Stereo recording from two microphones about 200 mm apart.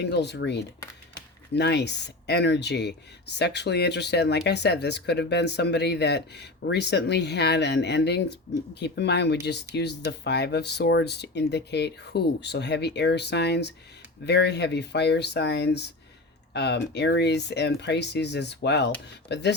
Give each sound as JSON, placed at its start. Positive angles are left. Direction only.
{"t": 0.0, "sound": "speech", "side_deg": 55}